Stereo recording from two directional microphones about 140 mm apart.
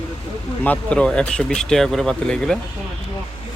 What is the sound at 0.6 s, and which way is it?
Speech, 10° left (ahead or behind).